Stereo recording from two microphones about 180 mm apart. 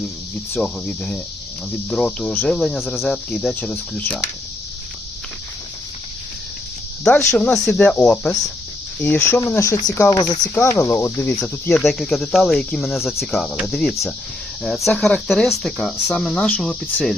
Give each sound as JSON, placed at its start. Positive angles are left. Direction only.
{"t": 0.5, "sound": "speech", "side_deg": 5}
{"t": 7.2, "sound": "speech", "side_deg": 10}